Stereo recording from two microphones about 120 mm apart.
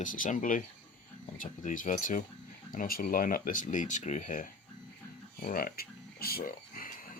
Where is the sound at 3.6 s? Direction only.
90° left.